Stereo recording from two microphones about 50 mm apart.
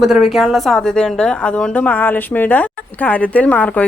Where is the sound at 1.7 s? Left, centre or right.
Left.